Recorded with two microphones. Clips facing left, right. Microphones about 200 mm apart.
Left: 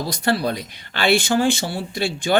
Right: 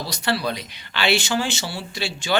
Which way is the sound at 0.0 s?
50° left (ahead or behind).